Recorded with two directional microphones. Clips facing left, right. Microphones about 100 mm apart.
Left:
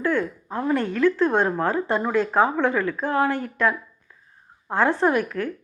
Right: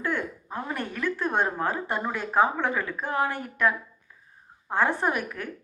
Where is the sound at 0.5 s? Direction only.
15° right (ahead or behind).